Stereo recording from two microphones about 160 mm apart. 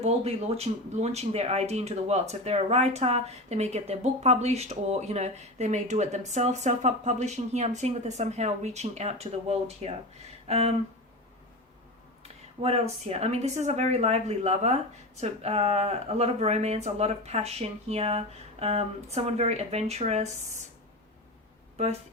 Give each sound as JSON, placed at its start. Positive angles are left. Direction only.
{"t": 0.0, "sound": "speech", "side_deg": -40}
{"t": 12.2, "sound": "speech", "side_deg": -40}
{"t": 21.8, "sound": "speech", "side_deg": -45}